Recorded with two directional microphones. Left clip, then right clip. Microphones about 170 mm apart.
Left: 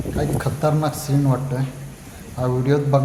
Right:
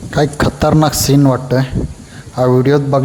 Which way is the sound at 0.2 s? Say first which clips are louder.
Right 10 dB; 65° right (ahead or behind).